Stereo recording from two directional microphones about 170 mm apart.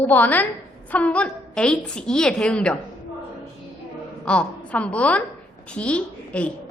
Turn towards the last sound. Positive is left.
turn(degrees=5)  # may be behind; listen again after turning